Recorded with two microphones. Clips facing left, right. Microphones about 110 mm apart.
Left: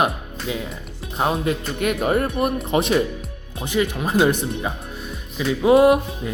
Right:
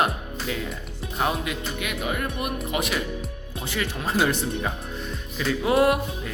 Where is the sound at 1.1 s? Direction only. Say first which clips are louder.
Left 5 dB; 30° left (ahead or behind).